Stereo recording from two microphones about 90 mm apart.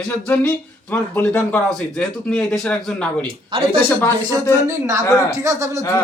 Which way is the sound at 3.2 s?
85° right.